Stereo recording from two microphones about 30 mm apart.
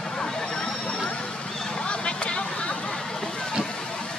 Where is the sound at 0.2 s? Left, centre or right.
Left.